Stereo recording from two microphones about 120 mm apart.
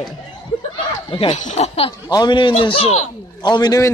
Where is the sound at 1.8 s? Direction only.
40° left (ahead or behind); by 3.1 s 55° left (ahead or behind).